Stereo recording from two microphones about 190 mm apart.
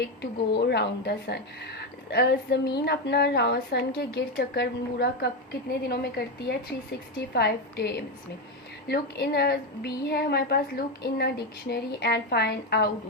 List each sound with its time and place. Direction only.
0.0 s a woman's voice: 60° left (ahead or behind)